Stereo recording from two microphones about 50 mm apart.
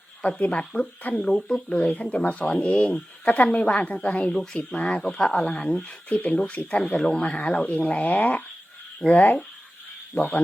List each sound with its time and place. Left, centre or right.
0.2 s speech: left
0.5 s speech: centre
1.7 s speech: left
4.3 s speech: centre
4.7 s speech: left
6.1 s speech: left
6.7 s speech: centre
7.2 s speech: left
9.0 s speech: centre